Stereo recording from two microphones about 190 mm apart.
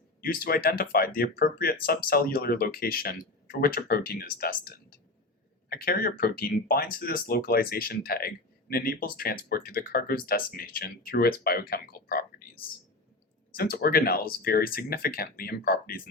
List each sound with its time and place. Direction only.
0.2 s speech: 50° left (ahead or behind)